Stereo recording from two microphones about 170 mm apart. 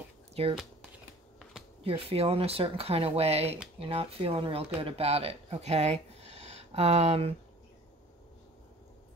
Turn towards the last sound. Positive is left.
turn(degrees=-35)  # may be behind; listen again after turning